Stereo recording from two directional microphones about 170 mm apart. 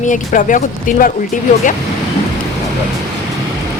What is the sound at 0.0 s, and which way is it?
A woman's voice, 50° left (ahead or behind).